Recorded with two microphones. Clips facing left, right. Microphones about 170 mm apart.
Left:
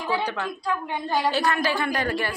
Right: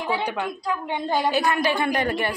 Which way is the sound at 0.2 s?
15° right (ahead or behind).